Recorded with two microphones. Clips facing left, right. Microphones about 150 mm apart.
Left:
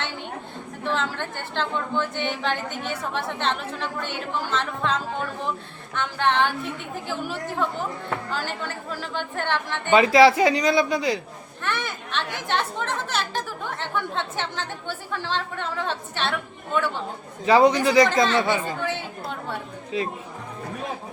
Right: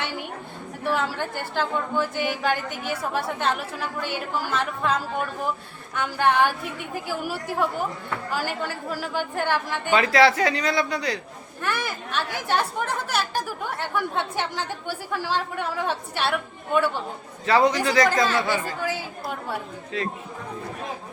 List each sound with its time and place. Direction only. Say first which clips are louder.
0.9 s speech: right 2 dB; 10° right (ahead or behind)
9.9 s a man's voice: left 4 dB; 15° left (ahead or behind)
11.6 s speech: right 1 dB; 5° right (ahead or behind)
17.4 s a man's voice: left 3 dB; 15° left (ahead or behind)
18.8 s speech: even; 5° right (ahead or behind)